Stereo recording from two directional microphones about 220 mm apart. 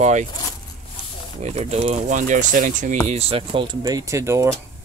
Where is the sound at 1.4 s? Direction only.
30° right (ahead or behind); by 4.5 s 15° right (ahead or behind).